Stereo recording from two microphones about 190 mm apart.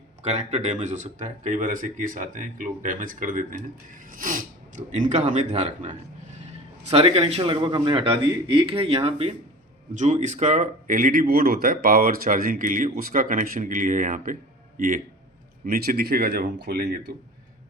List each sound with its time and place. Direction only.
0.2 s a man's voice: 35° right (ahead or behind)
15.6 s speech: 50° right (ahead or behind)